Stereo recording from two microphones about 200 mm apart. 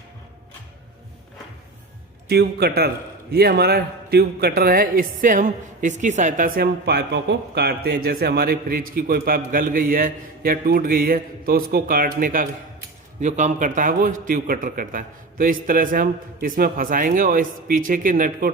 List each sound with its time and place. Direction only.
2.3 s a man's voice: 55° right (ahead or behind)